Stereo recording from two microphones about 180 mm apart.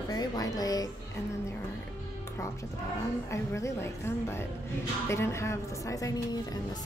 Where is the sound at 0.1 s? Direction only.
20° left (ahead or behind).